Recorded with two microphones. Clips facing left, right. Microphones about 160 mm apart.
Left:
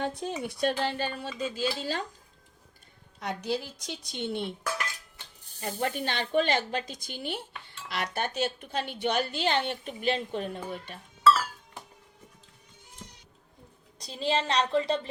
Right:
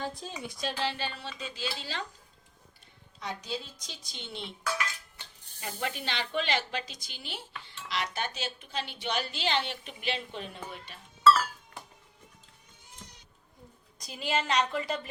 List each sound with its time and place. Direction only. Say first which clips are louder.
0.0 s a woman's voice: left 6 dB; 65° left (ahead or behind); by 2.0 s 45° left (ahead or behind)
3.2 s a woman's voice: left 6 dB; 60° left (ahead or behind)
5.5 s a woman's voice: left 5 dB; 45° left (ahead or behind)
14.0 s a woman's voice: left 3 dB; 30° left (ahead or behind)